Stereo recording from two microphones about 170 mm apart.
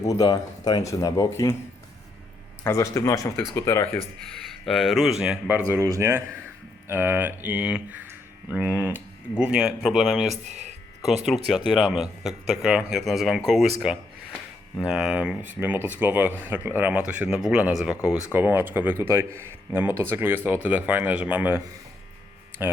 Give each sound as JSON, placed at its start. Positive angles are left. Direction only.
{"t": 0.1, "sound": "speech", "side_deg": 20}
{"t": 2.6, "sound": "speech", "side_deg": 15}
{"t": 4.3, "sound": "speech", "side_deg": 0}
{"t": 11.9, "sound": "speech", "side_deg": 0}
{"t": 22.6, "sound": "speech", "side_deg": -15}